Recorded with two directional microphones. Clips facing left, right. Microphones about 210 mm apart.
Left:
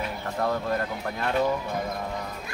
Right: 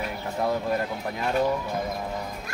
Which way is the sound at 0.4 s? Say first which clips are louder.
Right 1 dB; 10° right (ahead or behind).